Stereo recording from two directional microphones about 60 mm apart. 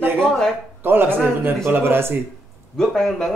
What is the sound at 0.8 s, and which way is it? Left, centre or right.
Speech, right.